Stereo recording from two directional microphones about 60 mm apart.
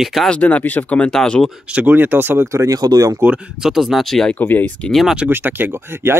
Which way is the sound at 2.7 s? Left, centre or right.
Right.